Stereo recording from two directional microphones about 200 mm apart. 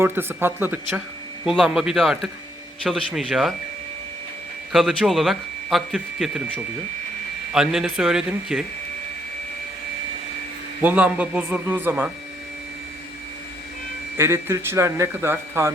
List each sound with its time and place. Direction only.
0.0 s a man's voice: 10° right (ahead or behind)
4.7 s a man's voice: centre (ahead or behind)
7.5 s a man's voice: 5° right (ahead or behind)
10.8 s speech: 10° right (ahead or behind)
14.2 s speech: 10° right (ahead or behind)